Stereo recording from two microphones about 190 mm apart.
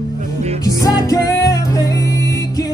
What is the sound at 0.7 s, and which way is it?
Music, 20° left (ahead or behind).